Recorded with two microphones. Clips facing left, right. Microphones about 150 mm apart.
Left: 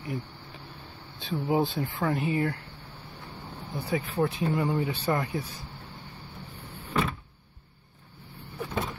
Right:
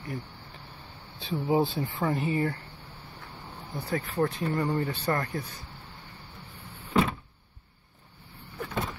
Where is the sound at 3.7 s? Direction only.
Centre (ahead or behind).